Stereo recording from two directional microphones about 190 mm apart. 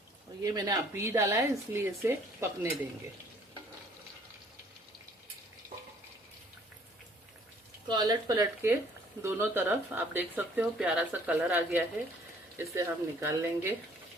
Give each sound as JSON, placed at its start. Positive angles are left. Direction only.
{"t": 0.4, "sound": "speech", "side_deg": -20}
{"t": 7.9, "sound": "speech", "side_deg": -20}